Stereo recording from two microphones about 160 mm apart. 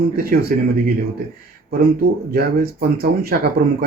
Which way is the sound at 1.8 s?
75° right (ahead or behind).